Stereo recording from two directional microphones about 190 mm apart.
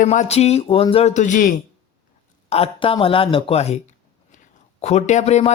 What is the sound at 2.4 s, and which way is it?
Speech, 30° left (ahead or behind).